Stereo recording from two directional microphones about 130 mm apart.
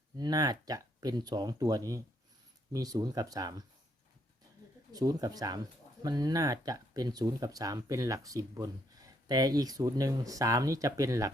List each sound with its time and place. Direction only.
0.2 s speech: 30° right (ahead or behind)
4.9 s speech: 30° right (ahead or behind)